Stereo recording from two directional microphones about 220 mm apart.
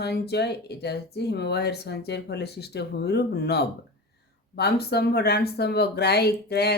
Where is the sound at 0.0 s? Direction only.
50° left (ahead or behind).